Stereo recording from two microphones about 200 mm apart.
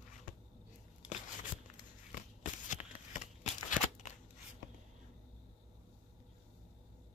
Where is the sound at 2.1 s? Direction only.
40° left (ahead or behind).